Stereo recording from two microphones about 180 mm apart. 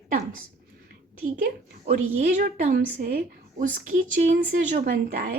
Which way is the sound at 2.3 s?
55° right (ahead or behind).